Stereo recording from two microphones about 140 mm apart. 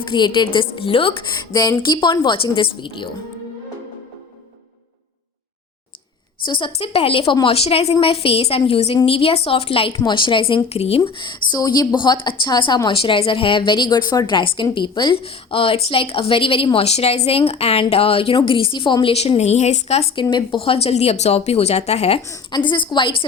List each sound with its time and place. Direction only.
0.0 s a woman's voice: 35° left (ahead or behind)
6.4 s a woman's voice: 35° left (ahead or behind)
22.5 s a woman's voice: 35° left (ahead or behind)